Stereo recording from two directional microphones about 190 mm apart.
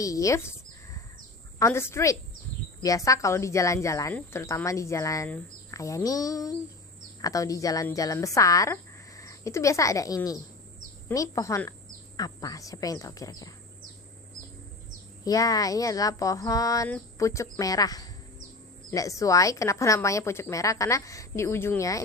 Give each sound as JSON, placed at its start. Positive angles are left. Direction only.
{"t": 0.0, "sound": "speech", "side_deg": 15}
{"t": 1.5, "sound": "speech", "side_deg": 15}
{"t": 15.2, "sound": "speech", "side_deg": 20}